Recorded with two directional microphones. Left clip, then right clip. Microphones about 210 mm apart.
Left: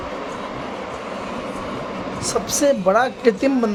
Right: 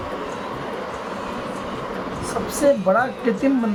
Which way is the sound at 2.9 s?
55° left (ahead or behind).